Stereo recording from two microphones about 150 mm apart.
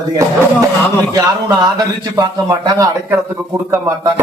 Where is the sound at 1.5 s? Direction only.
25° right (ahead or behind).